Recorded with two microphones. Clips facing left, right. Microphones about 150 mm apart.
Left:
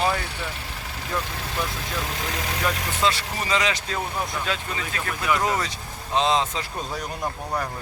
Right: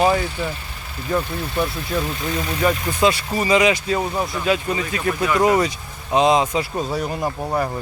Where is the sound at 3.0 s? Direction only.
10° right (ahead or behind).